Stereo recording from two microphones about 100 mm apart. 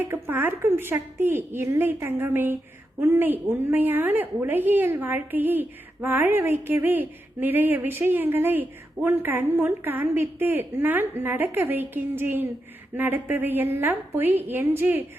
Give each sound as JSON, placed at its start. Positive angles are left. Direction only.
{"t": 0.0, "sound": "a woman's voice", "side_deg": -25}